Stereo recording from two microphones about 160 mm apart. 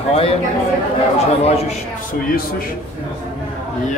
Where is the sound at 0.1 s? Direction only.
40° left (ahead or behind).